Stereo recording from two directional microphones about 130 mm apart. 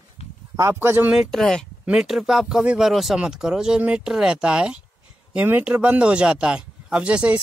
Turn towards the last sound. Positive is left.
turn(degrees=-10)  # may be behind; listen again after turning